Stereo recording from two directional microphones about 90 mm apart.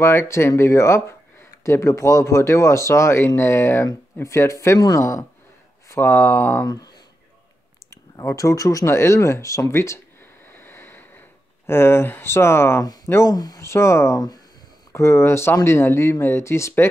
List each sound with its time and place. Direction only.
0.0 s speech: 30° left (ahead or behind)
6.6 s speech: 45° left (ahead or behind); by 9.9 s 30° left (ahead or behind)
10.4 s a sound: 25° left (ahead or behind)
12.8 s a sound: 45° left (ahead or behind)
13.3 s speech: 45° left (ahead or behind)
13.6 s speech: 30° left (ahead or behind)